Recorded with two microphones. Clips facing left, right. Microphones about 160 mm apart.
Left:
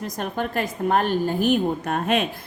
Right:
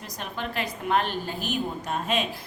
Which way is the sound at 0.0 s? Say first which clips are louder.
Left 7 dB; 50° left (ahead or behind).